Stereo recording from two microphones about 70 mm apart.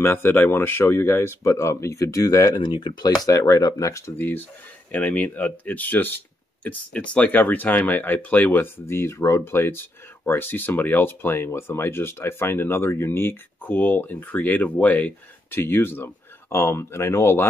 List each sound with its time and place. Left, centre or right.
0.0 s speech: left
2.6 s speech: left
4.2 s speech: left
8.8 s speech: left